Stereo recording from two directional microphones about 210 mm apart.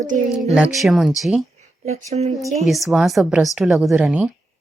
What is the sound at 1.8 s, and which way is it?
Speech, 30° right (ahead or behind).